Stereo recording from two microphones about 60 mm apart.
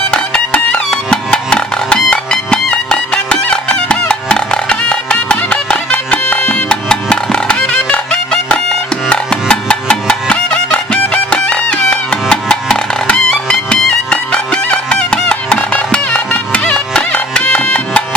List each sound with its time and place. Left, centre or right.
0.1 s music: centre